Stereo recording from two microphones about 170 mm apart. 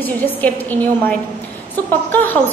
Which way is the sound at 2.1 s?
10° left (ahead or behind).